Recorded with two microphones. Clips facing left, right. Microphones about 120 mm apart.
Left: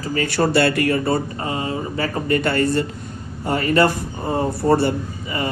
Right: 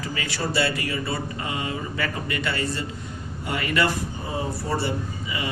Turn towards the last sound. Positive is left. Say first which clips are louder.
# left 5 dB
turn(degrees=45)  # may be behind; listen again after turning